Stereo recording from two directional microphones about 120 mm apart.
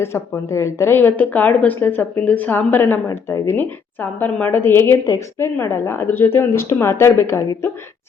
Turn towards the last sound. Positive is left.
turn(degrees=25)  # may be behind; listen again after turning